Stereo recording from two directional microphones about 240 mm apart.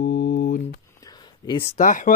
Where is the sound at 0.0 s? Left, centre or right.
Left.